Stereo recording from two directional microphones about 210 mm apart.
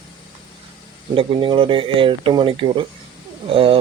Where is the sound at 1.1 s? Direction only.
25° right (ahead or behind).